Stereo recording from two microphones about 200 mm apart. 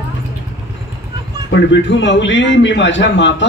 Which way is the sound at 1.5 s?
65° left (ahead or behind).